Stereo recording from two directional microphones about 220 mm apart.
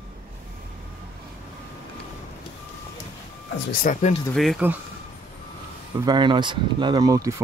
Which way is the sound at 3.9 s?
35° left (ahead or behind).